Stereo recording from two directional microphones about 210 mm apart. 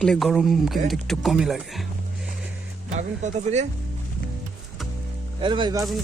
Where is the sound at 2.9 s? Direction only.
35° right (ahead or behind).